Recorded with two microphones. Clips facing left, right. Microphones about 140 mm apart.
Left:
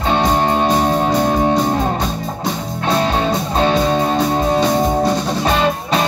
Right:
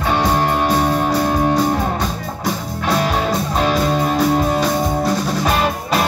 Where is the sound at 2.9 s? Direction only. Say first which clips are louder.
Left 1 dB; 25° left (ahead or behind).